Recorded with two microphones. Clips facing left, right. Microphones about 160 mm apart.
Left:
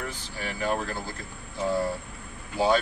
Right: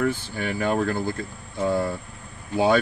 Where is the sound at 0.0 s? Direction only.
55° right (ahead or behind).